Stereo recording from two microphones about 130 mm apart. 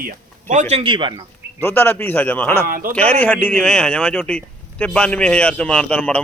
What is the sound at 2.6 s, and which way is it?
Speech, 90° right.